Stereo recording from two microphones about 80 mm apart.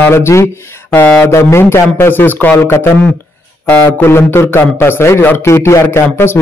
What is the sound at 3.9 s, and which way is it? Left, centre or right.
A man's voice, left.